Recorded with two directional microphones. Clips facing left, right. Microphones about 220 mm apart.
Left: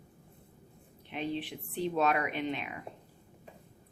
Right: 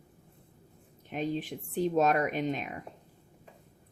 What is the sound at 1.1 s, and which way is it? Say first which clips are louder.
A woman's voice: right 3 dB; 45° right (ahead or behind).